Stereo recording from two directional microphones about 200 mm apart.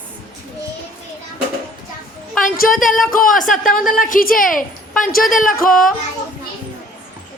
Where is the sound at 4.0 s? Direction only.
45° left (ahead or behind).